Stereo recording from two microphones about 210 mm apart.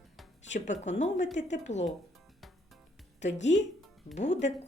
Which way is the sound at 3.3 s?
60° left (ahead or behind).